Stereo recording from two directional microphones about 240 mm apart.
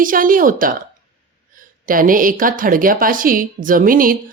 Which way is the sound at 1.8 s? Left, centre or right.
Right.